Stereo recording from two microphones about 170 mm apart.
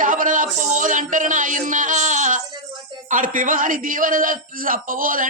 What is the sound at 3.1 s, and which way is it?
A man's voice, 50° right (ahead or behind).